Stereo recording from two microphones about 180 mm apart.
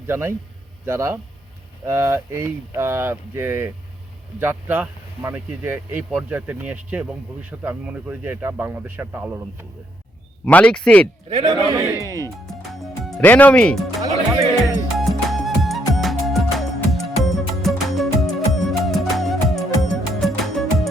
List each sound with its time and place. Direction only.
0.1 s speech: 15° right (ahead or behind)
10.4 s speech: 5° left (ahead or behind)
11.3 s a man's voice: 25° right (ahead or behind)
12.0 s speech: 15° left (ahead or behind)
12.6 s music: centre (ahead or behind)